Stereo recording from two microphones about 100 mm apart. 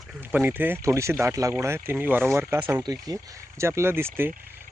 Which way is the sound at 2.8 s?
40° right (ahead or behind).